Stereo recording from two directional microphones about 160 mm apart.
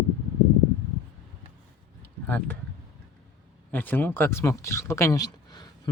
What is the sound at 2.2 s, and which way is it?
Speech, 10° left (ahead or behind).